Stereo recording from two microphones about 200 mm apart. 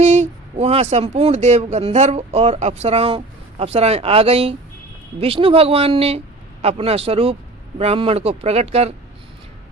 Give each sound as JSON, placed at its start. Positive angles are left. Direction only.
{"t": 0.0, "sound": "speech", "side_deg": -35}